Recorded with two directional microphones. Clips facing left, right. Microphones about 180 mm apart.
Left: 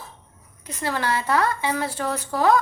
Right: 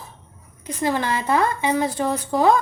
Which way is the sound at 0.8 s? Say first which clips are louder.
Right 3 dB; 15° right (ahead or behind).